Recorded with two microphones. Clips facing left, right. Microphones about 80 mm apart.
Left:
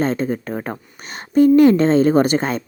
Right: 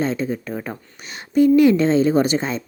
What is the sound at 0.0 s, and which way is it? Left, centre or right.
Speech, left.